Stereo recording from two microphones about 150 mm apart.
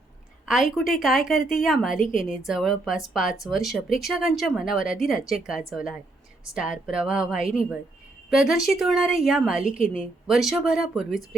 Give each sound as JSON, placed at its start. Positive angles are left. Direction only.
{"t": 0.4, "sound": "speech", "side_deg": 0}